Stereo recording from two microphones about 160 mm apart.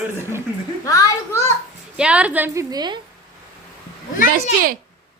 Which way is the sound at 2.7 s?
25° right (ahead or behind).